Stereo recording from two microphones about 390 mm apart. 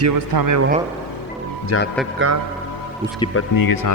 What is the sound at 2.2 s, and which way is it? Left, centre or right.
Speech, right.